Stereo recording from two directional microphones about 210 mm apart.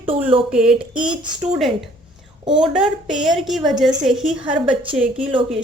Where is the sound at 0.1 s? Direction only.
25° right (ahead or behind).